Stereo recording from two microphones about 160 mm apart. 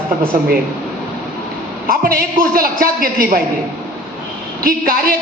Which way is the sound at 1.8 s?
65° right (ahead or behind).